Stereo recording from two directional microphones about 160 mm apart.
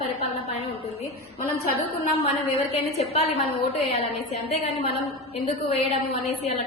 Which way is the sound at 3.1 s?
40° left (ahead or behind).